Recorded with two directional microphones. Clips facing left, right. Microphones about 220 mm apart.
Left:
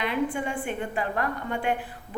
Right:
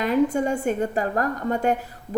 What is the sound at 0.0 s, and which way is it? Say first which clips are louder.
A woman's voice: right 7 dB; 40° right (ahead or behind).